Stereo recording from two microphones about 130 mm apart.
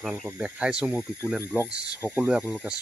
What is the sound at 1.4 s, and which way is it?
Speech, 20° right (ahead or behind).